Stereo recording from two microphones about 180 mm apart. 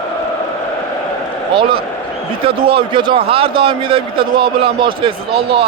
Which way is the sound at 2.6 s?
30° right (ahead or behind).